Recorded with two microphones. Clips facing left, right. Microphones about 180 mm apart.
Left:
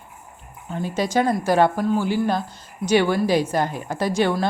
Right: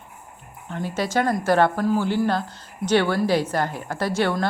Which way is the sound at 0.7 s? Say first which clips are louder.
Left 2 dB; 15° left (ahead or behind).